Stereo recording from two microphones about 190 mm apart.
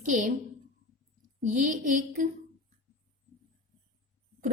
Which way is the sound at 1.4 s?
40° right (ahead or behind).